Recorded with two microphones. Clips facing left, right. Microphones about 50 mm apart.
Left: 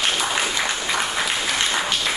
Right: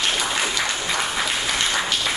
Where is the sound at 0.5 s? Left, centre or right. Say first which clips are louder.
Left 1 dB; centre.